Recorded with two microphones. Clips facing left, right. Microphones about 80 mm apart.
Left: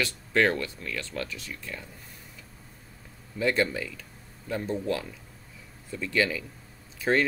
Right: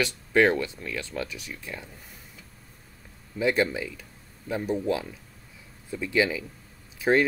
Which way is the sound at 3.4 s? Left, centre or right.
Centre.